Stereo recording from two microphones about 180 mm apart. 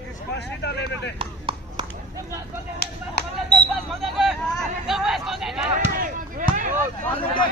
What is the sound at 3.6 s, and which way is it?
Hubbub, centre (ahead or behind).